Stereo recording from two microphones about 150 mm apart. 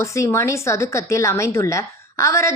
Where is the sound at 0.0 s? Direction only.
20° left (ahead or behind).